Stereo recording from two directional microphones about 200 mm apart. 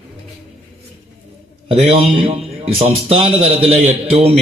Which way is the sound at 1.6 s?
30° right (ahead or behind).